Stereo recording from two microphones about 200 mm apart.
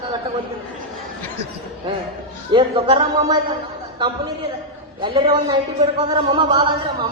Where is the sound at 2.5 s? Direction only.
25° right (ahead or behind).